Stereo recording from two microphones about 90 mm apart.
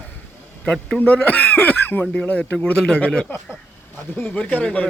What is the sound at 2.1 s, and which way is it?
A man's voice, 10° left (ahead or behind).